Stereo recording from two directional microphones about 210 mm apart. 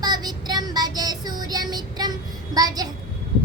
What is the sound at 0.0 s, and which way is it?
Child singing, 20° right (ahead or behind).